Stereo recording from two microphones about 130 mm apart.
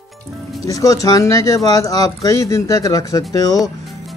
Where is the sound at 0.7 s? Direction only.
25° left (ahead or behind).